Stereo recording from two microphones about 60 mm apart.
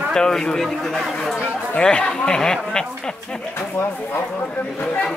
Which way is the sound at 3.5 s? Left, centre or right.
Left.